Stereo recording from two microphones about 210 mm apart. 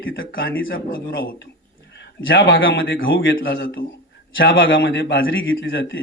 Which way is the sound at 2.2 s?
65° left (ahead or behind).